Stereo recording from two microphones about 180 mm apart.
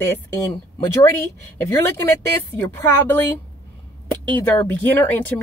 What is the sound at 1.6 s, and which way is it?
Speech, 15° left (ahead or behind).